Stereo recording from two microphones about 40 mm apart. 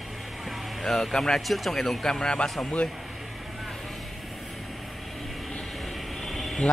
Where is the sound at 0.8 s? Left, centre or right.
Centre.